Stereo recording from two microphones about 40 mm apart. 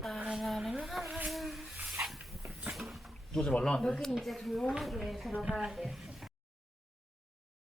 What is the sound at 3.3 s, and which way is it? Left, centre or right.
Speech, centre.